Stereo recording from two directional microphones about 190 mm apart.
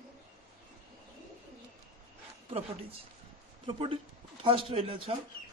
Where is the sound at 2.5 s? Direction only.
30° right (ahead or behind).